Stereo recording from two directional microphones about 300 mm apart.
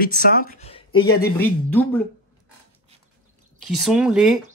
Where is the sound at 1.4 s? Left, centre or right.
Centre.